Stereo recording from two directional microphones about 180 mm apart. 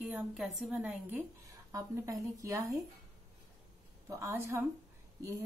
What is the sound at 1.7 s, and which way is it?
Speech, 20° right (ahead or behind).